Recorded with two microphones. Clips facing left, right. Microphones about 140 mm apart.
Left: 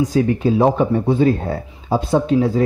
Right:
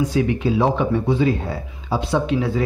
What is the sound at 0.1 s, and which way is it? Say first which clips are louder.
Speech: left 3 dB; 40° left (ahead or behind).